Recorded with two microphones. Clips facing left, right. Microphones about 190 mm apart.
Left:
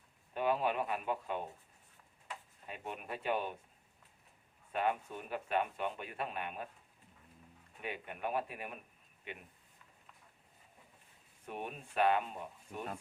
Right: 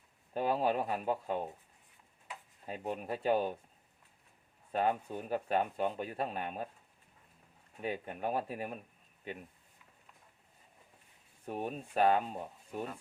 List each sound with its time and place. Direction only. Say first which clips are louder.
0.3 s a man's voice: right 2 dB; 35° right (ahead or behind)
2.6 s a man's voice: right 6 dB; 35° right (ahead or behind)
4.7 s a man's voice: right 3 dB; 35° right (ahead or behind)
7.8 s a man's voice: right 4 dB; 35° right (ahead or behind)
11.4 s a man's voice: right 5 dB; 35° right (ahead or behind)